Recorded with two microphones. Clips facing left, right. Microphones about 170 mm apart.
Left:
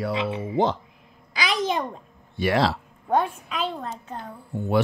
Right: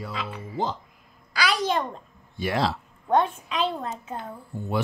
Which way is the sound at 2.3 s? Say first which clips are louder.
Left 4 dB; 70° left (ahead or behind).